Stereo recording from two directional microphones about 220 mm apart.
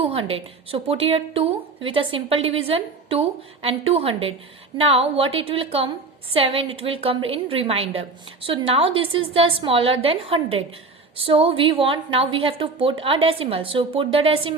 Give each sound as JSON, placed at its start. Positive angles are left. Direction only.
{"t": 0.0, "sound": "a woman's voice", "side_deg": -25}